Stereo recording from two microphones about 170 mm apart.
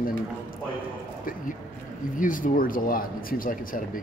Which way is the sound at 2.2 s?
55° left (ahead or behind).